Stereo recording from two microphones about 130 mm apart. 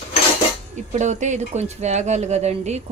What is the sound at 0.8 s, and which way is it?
A woman's voice, 65° right (ahead or behind).